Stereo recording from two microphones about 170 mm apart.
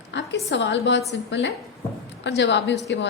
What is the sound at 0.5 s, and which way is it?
A woman's voice, 90° left.